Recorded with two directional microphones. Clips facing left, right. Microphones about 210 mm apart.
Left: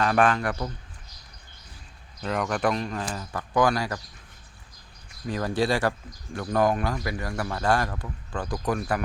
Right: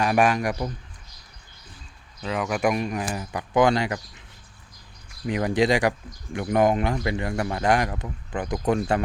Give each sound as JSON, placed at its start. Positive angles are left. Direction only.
{"t": 0.0, "sound": "speech", "side_deg": -10}
{"t": 2.2, "sound": "speech", "side_deg": -5}
{"t": 5.2, "sound": "speech", "side_deg": -20}